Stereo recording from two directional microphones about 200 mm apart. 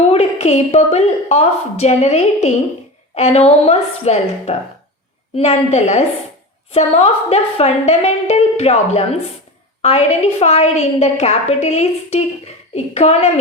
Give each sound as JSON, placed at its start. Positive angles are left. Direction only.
{"t": 0.0, "sound": "a woman's voice", "side_deg": 30}